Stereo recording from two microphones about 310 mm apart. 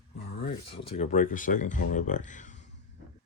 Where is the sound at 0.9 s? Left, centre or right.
Left.